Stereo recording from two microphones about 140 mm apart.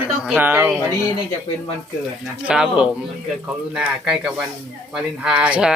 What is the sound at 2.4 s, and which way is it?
Speech, 10° right (ahead or behind).